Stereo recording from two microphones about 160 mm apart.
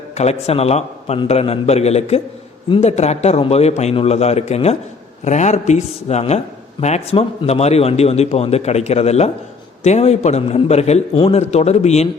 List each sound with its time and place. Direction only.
0.1 s a man's voice: 45° left (ahead or behind)